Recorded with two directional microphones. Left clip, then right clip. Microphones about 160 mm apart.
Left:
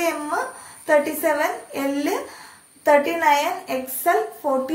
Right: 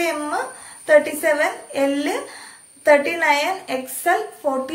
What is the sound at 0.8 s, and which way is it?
A woman's voice, 20° right (ahead or behind).